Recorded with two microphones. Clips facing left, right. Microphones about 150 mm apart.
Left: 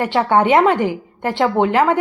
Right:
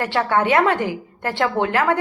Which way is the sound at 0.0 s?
20° left (ahead or behind).